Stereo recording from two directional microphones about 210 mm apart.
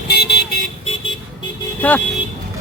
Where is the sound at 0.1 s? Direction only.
50° left (ahead or behind).